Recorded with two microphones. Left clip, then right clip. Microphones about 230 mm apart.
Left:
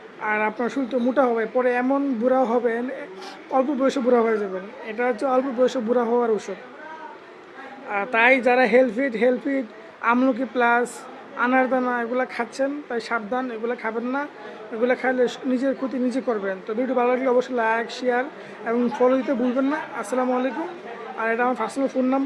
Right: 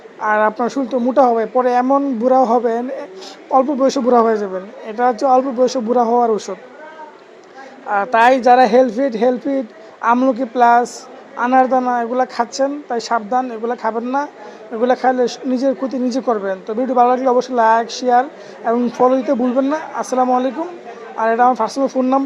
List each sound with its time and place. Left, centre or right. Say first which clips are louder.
0.2 s a woman's voice: right 8 dB; centre
7.9 s a woman's voice: right 6 dB; centre
15.9 s speech: right 5 dB; centre
16.2 s a woman's voice: right 7 dB; centre